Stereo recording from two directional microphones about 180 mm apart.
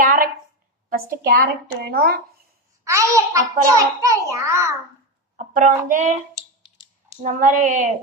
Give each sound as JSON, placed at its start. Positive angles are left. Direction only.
{"t": 0.0, "sound": "a sound", "side_deg": -50}
{"t": 0.9, "sound": "a woman's voice", "side_deg": -60}
{"t": 2.8, "sound": "a child's voice", "side_deg": -15}
{"t": 5.4, "sound": "speech", "side_deg": -45}
{"t": 7.2, "sound": "speech", "side_deg": -45}